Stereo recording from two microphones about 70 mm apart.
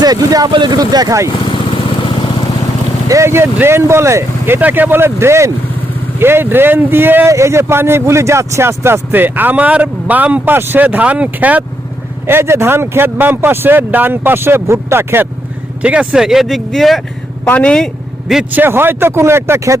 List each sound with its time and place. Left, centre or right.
0.0 s speech: right
3.1 s speech: right
7.3 s a man's voice: right
12.3 s speech: right
15.8 s speech: centre
17.4 s speech: left
18.5 s speech: right